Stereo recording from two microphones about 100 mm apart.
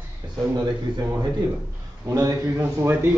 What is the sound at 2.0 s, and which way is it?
Speech, 35° right (ahead or behind).